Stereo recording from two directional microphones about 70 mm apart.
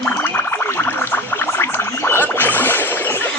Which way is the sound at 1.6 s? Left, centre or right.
Left.